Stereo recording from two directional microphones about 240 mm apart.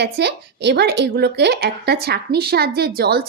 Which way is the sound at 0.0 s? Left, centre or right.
Right.